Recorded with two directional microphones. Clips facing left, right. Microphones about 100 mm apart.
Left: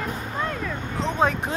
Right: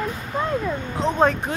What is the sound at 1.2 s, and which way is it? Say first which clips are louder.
Speech: right 3 dB; 5° left (ahead or behind).